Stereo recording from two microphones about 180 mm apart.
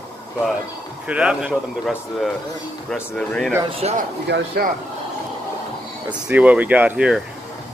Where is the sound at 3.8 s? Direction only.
35° right (ahead or behind).